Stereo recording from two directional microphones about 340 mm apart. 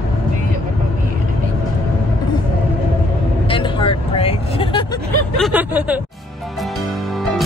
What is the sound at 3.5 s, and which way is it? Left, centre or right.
Vehicle, centre.